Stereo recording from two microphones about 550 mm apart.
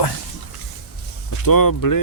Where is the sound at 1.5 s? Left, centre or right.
Left.